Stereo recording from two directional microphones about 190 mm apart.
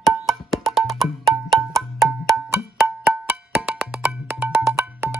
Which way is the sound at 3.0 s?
5° right (ahead or behind).